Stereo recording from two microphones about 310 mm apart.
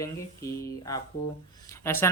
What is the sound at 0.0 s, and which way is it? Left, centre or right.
Speech, centre.